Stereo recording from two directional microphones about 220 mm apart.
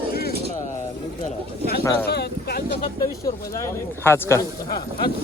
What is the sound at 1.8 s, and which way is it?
Speech, 10° left (ahead or behind).